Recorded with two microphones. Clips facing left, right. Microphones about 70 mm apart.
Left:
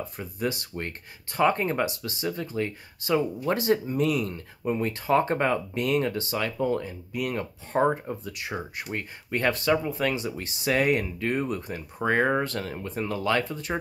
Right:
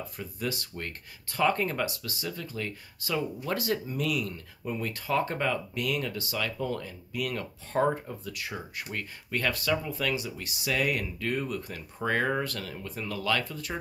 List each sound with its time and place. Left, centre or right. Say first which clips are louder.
0.2 s speech: left 4 dB; left